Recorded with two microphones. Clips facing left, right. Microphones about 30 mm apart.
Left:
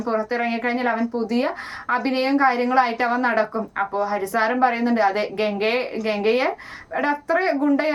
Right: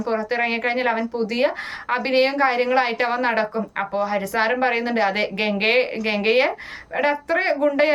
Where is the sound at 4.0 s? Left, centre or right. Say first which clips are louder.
Right 2 dB; right.